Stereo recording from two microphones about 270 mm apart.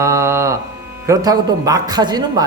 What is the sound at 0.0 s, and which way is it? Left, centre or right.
Mantra, centre.